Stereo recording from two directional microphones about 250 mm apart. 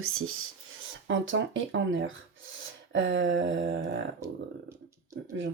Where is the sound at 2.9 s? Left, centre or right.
Right.